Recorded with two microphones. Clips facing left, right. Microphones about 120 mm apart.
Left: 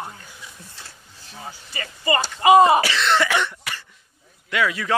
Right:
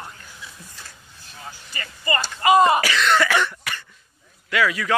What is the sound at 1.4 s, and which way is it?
Speech, 25° left (ahead or behind).